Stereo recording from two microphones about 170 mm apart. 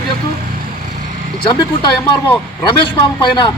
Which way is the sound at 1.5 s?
25° left (ahead or behind).